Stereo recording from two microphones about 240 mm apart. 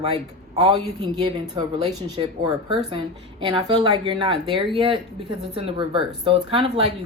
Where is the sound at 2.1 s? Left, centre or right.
Centre.